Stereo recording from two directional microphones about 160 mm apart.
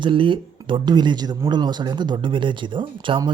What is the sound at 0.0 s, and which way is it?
Speech, 30° right (ahead or behind).